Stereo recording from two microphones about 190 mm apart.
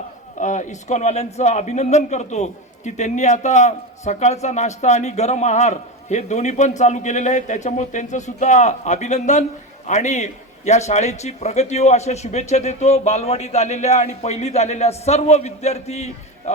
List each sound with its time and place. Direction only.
0.3 s speech: 40° left (ahead or behind)